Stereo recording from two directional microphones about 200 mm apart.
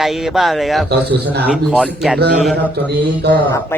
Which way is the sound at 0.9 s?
55° right (ahead or behind).